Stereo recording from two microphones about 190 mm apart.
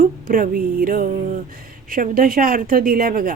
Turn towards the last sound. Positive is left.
turn(degrees=-50)  # may be behind; listen again after turning